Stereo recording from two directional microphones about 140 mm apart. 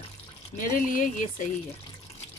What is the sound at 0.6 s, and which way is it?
Speech, 70° left (ahead or behind).